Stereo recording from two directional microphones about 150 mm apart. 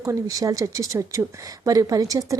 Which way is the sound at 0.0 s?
20° right (ahead or behind).